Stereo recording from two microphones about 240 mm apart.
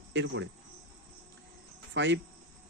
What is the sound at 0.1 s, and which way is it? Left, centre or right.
Speech, right.